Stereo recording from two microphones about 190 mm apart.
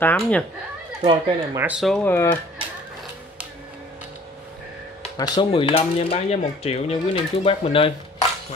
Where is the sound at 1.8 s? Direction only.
5° left (ahead or behind).